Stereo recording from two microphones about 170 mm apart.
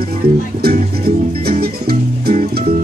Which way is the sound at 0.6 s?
65° right (ahead or behind).